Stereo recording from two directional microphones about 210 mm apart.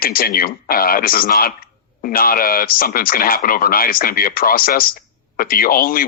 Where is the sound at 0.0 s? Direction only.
45° left (ahead or behind).